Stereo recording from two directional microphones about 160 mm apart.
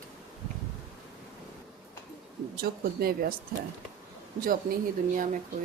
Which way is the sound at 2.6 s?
70° right (ahead or behind).